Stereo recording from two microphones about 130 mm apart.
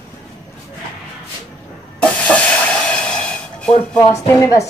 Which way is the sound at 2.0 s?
10° left (ahead or behind).